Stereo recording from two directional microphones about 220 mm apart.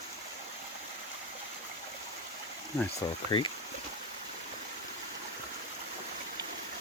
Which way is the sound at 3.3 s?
25° left (ahead or behind).